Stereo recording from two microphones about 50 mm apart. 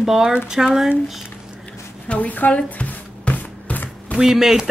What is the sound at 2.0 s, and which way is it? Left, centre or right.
Speech, left.